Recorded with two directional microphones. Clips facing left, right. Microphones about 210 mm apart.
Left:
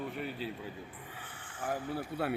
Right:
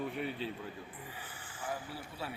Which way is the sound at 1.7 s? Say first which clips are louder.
Left 6 dB; 60° left (ahead or behind).